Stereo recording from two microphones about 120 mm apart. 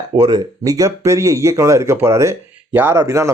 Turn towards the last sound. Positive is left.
turn(degrees=-25)  # may be behind; listen again after turning